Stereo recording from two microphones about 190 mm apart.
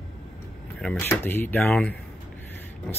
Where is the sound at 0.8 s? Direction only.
10° left (ahead or behind).